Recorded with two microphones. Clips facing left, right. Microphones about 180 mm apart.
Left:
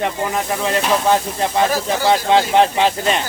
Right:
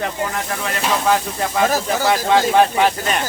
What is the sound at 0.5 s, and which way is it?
Speech, 20° left (ahead or behind).